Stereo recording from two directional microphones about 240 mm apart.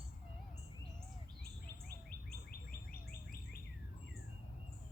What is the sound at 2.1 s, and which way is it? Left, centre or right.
Bird, left.